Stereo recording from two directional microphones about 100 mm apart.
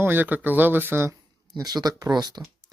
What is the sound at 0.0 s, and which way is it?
Speech, 20° right (ahead or behind).